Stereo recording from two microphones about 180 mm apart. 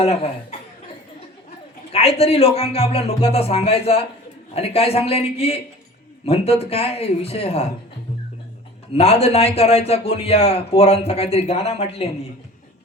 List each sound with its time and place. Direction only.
0.0 s a man's voice: 35° left (ahead or behind)
1.9 s a man's voice: 35° left (ahead or behind)
9.0 s a man's voice: 35° left (ahead or behind)